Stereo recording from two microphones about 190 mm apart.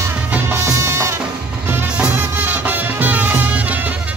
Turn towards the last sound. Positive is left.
turn(degrees=-10)  # may be behind; listen again after turning